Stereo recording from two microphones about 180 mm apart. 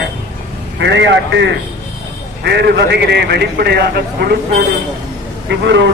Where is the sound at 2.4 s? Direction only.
70° right (ahead or behind).